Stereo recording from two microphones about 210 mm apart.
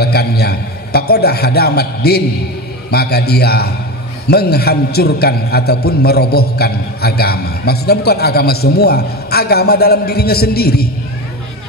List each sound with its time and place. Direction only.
0.0 s a man's voice: 50° left (ahead or behind)